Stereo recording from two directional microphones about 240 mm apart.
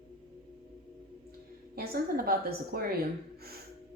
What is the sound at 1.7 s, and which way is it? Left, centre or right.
A woman's voice, right.